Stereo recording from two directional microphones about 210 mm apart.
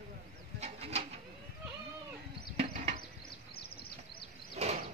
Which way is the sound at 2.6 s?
30° right (ahead or behind).